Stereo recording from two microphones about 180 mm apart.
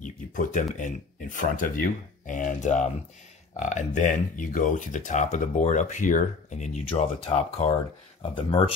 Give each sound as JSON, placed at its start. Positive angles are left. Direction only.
{"t": 0.0, "sound": "speech", "side_deg": 45}